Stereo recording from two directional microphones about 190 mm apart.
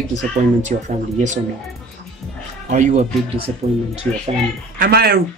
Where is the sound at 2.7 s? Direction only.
40° right (ahead or behind).